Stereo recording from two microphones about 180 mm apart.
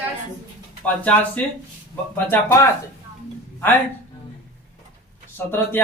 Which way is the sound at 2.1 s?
10° left (ahead or behind).